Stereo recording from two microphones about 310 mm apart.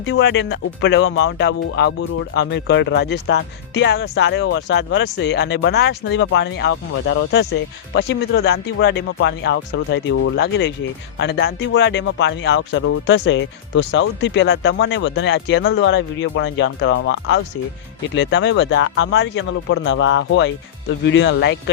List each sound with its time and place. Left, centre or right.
0.0 s speech: left